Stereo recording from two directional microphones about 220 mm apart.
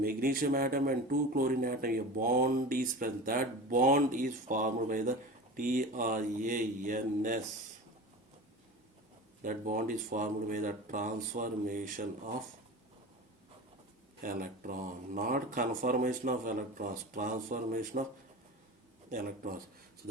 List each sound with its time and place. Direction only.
0.0 s speech: 40° right (ahead or behind)
9.4 s speech: 40° right (ahead or behind)
14.2 s speech: 40° right (ahead or behind)
19.1 s speech: 40° right (ahead or behind)